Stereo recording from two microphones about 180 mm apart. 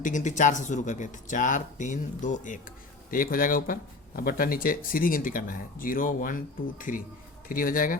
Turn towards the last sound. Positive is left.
turn(degrees=50)  # may be behind; listen again after turning